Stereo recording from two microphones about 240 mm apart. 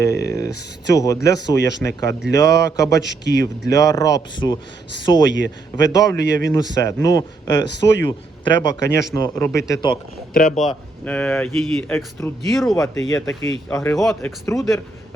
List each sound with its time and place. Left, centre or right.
0.3 s a man's voice: centre
3.0 s speech: left
3.7 s a man's voice: centre
10.3 s a man's voice: left
10.6 s speech: centre
12.7 s a man's voice: centre